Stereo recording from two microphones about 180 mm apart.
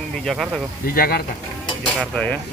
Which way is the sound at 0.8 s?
55° left (ahead or behind).